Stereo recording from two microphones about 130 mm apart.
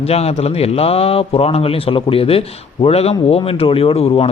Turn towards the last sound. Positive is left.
turn(degrees=50)  # may be behind; listen again after turning